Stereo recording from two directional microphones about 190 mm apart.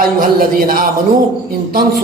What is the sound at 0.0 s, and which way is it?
A man's voice, 50° right (ahead or behind).